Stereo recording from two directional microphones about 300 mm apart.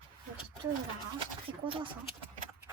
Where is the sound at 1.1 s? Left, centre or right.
Centre.